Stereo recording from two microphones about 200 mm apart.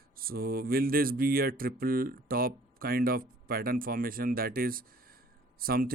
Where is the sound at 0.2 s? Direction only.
50° right (ahead or behind).